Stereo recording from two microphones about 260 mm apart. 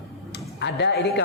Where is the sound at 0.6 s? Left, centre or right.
Left.